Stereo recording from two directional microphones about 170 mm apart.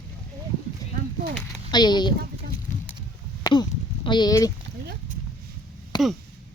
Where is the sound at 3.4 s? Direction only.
25° left (ahead or behind).